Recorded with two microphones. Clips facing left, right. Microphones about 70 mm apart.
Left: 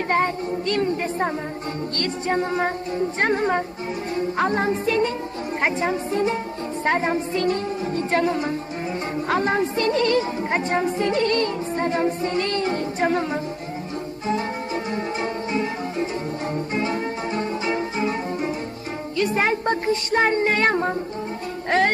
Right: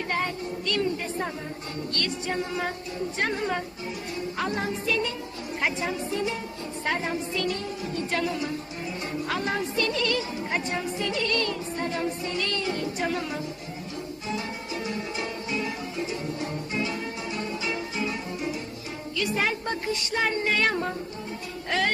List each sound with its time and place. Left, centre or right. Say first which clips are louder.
0.1 s music: left 9 dB; left
2.0 s a woman's voice: left 6 dB; left
14.3 s music: left 9 dB; left
19.1 s speech: left 6 dB; left
21.7 s music: left 7 dB; left